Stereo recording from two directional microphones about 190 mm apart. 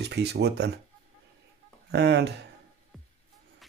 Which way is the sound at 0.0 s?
60° right (ahead or behind).